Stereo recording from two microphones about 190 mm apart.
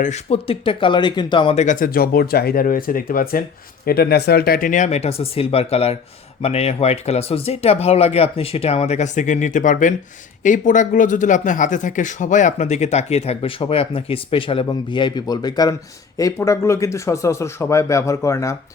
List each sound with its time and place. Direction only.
0.0 s speech: 35° left (ahead or behind)
1.6 s speech: 45° left (ahead or behind); by 18.5 s 15° left (ahead or behind)